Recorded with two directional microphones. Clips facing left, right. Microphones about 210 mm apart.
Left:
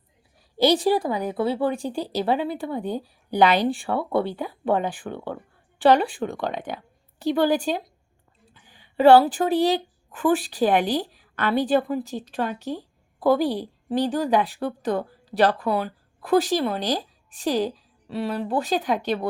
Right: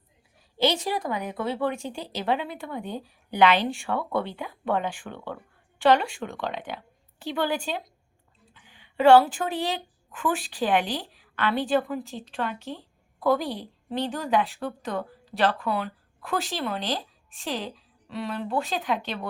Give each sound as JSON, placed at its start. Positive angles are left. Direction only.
{"t": 0.6, "sound": "a woman's voice", "side_deg": 35}